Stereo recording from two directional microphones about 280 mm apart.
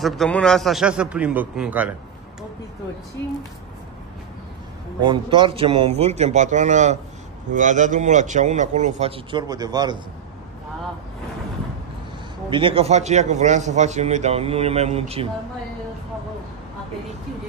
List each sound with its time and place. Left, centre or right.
0.0 s a man's voice: centre
5.0 s a man's voice: centre
12.4 s a man's voice: centre